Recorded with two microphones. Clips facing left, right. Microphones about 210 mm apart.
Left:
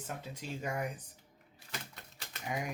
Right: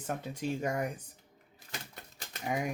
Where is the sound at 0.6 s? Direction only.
40° right (ahead or behind).